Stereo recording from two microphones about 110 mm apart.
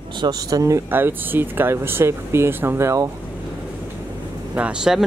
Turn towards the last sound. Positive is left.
turn(degrees=-10)  # may be behind; listen again after turning